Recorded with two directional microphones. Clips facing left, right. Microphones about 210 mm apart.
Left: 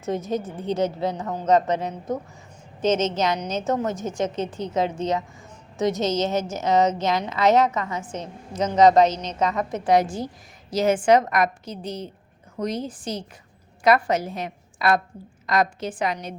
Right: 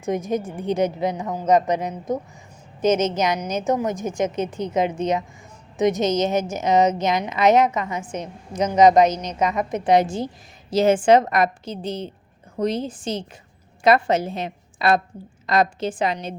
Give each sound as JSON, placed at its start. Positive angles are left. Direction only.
{"t": 0.0, "sound": "a woman's voice", "side_deg": -15}